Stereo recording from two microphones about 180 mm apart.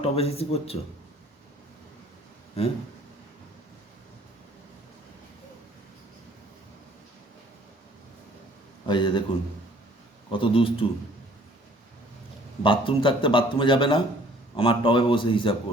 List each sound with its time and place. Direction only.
0.0 s speech: 35° left (ahead or behind)
8.9 s speech: 25° left (ahead or behind)
10.3 s speech: 30° left (ahead or behind)
12.6 s speech: 25° left (ahead or behind)